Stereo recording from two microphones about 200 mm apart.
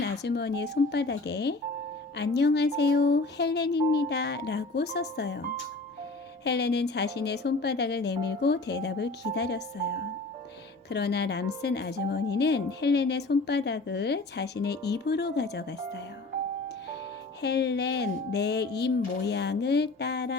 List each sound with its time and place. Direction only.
0.0 s a woman's voice: 55° left (ahead or behind)
17.4 s a woman's voice: 55° left (ahead or behind)